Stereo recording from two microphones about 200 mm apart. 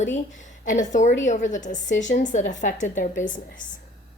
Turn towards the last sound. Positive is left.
turn(degrees=40)  # may be behind; listen again after turning